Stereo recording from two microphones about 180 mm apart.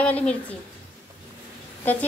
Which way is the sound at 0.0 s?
5° left (ahead or behind).